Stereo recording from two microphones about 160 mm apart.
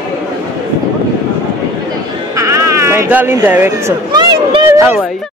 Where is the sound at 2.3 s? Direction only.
20° right (ahead or behind).